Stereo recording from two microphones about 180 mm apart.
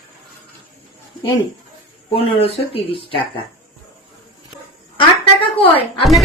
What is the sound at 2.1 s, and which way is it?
Speech, 35° left (ahead or behind).